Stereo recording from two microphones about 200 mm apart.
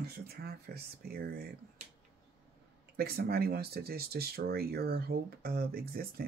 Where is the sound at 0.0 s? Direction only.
50° right (ahead or behind).